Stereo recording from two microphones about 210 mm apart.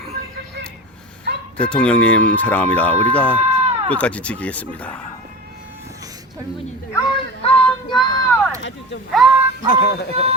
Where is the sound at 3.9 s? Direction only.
5° left (ahead or behind).